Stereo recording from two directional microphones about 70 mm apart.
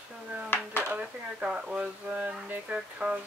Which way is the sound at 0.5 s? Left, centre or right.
Left.